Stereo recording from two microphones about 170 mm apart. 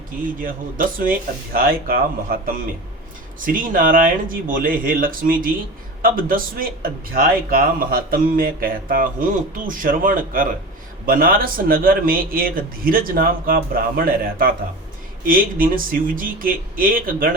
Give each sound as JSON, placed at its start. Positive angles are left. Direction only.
{"t": 0.3, "sound": "a man's voice", "side_deg": -55}